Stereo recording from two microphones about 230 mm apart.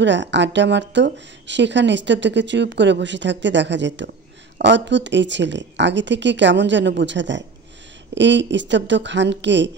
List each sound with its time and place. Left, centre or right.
0.0 s speech: right